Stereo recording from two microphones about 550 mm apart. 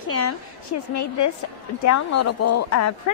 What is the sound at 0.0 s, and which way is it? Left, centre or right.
A woman's voice, left.